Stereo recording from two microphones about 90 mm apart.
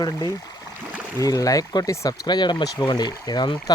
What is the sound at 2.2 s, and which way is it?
Speech, 55° left (ahead or behind).